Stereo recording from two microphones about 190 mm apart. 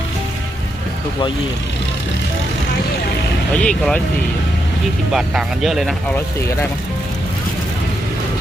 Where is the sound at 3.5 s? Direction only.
5° left (ahead or behind).